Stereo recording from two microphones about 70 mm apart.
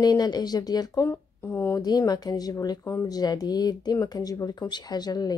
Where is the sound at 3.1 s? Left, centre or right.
Left.